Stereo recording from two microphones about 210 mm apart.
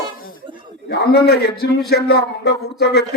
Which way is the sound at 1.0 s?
50° left (ahead or behind).